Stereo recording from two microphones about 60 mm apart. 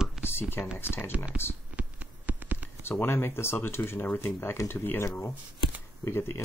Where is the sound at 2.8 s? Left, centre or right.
Left.